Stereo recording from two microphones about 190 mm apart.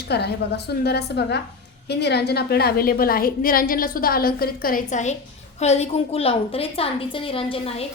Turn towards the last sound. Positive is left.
turn(degrees=30)  # may be behind; listen again after turning